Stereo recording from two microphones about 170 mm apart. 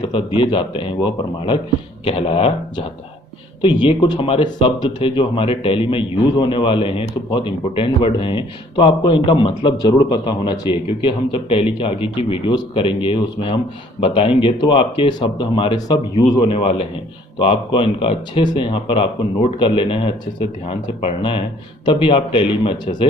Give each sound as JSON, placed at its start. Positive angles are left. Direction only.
{"t": 0.3, "sound": "speech", "side_deg": 30}